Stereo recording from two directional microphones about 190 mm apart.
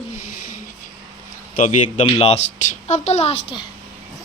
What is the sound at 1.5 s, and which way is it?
A man's voice, 40° left (ahead or behind).